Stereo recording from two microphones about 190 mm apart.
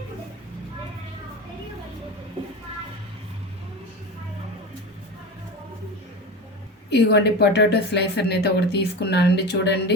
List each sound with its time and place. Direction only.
6.9 s speech: 60° left (ahead or behind)